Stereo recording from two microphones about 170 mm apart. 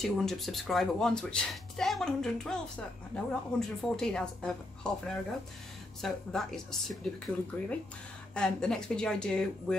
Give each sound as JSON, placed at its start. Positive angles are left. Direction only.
{"t": 0.0, "sound": "speech", "side_deg": 0}